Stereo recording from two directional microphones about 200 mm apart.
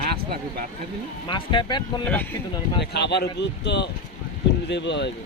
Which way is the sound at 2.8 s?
55° left (ahead or behind).